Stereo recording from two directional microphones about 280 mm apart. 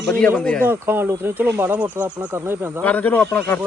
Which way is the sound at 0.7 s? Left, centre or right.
Centre.